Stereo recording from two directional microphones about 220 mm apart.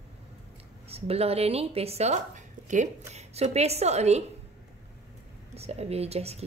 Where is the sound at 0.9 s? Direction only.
25° right (ahead or behind).